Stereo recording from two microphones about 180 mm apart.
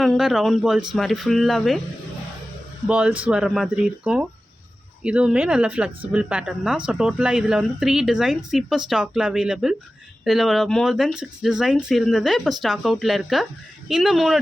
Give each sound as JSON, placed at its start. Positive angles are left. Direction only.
{"t": 0.0, "sound": "speech", "side_deg": 0}
{"t": 2.8, "sound": "speech", "side_deg": -5}